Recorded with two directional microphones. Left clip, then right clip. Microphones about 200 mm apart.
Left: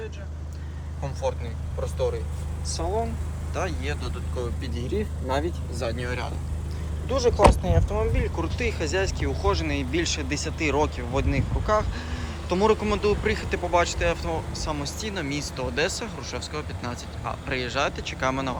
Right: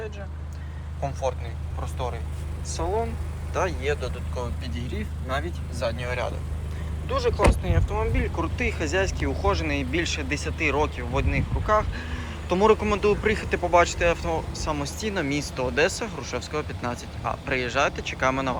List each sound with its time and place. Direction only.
2.6 s speech: 5° left (ahead or behind)
7.1 s speech: 15° left (ahead or behind)